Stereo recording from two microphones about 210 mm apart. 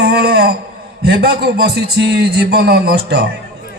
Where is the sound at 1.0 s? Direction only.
50° right (ahead or behind).